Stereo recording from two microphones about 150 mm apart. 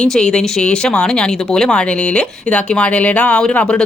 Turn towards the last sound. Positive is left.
turn(degrees=5)  # may be behind; listen again after turning